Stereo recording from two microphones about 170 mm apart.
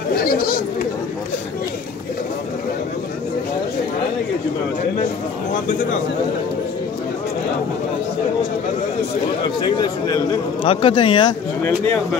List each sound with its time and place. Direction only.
0.1 s speech: 60° left (ahead or behind)
9.6 s a man's voice: 25° left (ahead or behind)
11.6 s speech: 10° left (ahead or behind)